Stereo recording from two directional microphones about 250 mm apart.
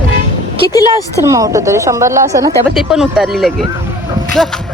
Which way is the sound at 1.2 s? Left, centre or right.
Centre.